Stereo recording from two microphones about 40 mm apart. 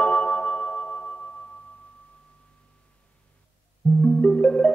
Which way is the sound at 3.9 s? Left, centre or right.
Left.